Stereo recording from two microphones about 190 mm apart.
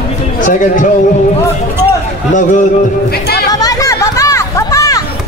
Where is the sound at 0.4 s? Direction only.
45° left (ahead or behind).